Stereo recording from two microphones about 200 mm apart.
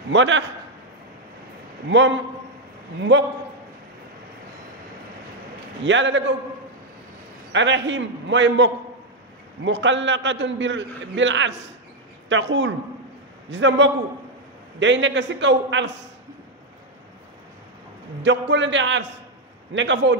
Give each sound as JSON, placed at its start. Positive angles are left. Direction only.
{"t": 0.1, "sound": "a man's voice", "side_deg": -65}
{"t": 1.9, "sound": "a man's voice", "side_deg": -65}
{"t": 5.9, "sound": "a man's voice", "side_deg": -65}
{"t": 7.5, "sound": "a man's voice", "side_deg": -65}
{"t": 18.5, "sound": "a man's voice", "side_deg": -65}